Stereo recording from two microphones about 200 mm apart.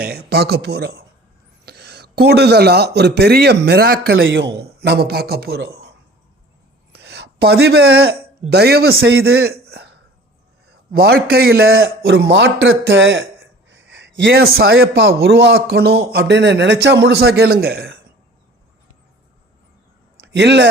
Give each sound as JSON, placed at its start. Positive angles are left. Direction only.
{"t": 0.0, "sound": "speech", "side_deg": -50}
{"t": 4.2, "sound": "a man's voice", "side_deg": -65}
{"t": 6.9, "sound": "speech", "side_deg": -55}
{"t": 10.7, "sound": "a man's voice", "side_deg": -50}
{"t": 11.7, "sound": "speech", "side_deg": -65}
{"t": 13.7, "sound": "a sound", "side_deg": -65}
{"t": 14.8, "sound": "a man's voice", "side_deg": -65}
{"t": 20.2, "sound": "speech", "side_deg": -60}